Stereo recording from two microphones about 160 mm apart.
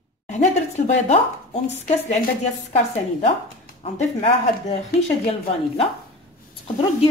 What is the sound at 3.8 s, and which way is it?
Speech, 40° left (ahead or behind).